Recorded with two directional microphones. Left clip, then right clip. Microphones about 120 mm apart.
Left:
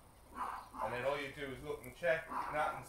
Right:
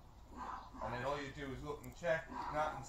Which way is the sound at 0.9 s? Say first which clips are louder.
Left 2 dB; 20° left (ahead or behind).